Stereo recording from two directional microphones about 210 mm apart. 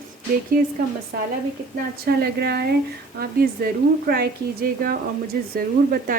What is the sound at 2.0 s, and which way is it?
A woman's voice, 45° right (ahead or behind).